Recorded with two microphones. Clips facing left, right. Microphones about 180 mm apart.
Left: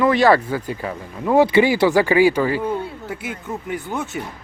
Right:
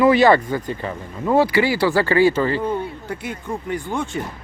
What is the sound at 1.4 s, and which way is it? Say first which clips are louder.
Speech: left 3 dB; 20° left (ahead or behind).